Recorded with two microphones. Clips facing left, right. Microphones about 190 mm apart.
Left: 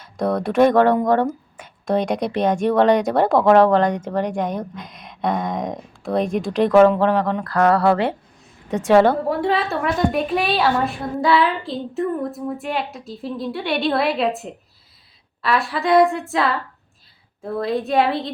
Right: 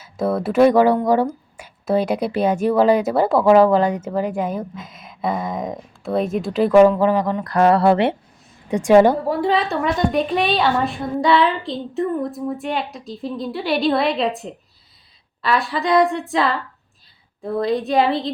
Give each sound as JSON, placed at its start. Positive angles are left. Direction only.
{"t": 0.0, "sound": "a woman's voice", "side_deg": -5}
{"t": 6.9, "sound": "mantra", "side_deg": -10}
{"t": 8.7, "sound": "a woman's voice", "side_deg": -10}
{"t": 9.2, "sound": "a woman's voice", "side_deg": 0}